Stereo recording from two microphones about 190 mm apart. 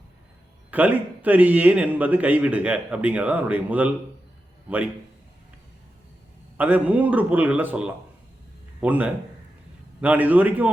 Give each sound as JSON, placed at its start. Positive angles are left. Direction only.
{"t": 0.7, "sound": "a man's voice", "side_deg": -10}
{"t": 6.6, "sound": "a man's voice", "side_deg": -10}